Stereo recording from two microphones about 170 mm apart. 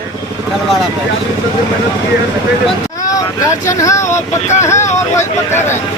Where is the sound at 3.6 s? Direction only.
15° left (ahead or behind).